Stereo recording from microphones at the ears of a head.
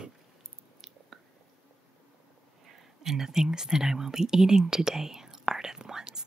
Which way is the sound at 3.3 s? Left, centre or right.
Centre.